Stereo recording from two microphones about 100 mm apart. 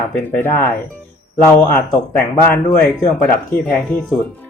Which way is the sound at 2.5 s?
15° left (ahead or behind).